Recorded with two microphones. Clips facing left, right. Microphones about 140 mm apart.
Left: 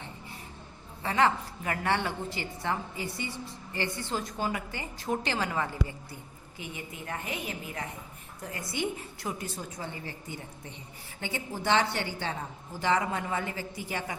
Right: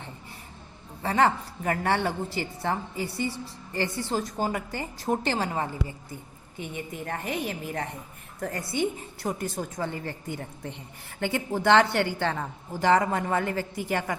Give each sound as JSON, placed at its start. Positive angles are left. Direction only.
{"t": 1.0, "sound": "a woman's voice", "side_deg": -40}
{"t": 7.0, "sound": "a woman's voice", "side_deg": -45}